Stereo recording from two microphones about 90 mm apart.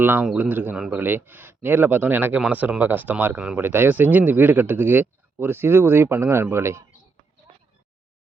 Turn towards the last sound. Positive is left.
turn(degrees=-30)  # may be behind; listen again after turning